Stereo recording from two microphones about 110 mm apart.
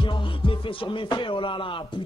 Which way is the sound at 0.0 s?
50° left (ahead or behind).